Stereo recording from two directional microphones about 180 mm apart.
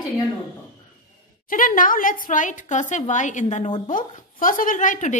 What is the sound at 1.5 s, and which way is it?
A woman's voice, 50° left (ahead or behind).